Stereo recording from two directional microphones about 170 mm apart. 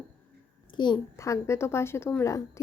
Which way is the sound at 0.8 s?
20° left (ahead or behind).